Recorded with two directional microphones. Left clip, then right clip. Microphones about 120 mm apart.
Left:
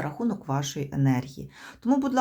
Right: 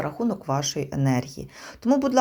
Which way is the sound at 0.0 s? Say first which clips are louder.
Right 3 dB; 10° right (ahead or behind).